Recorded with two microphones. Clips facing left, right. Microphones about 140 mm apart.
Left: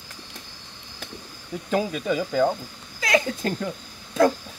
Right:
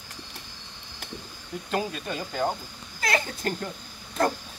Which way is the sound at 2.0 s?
90° left.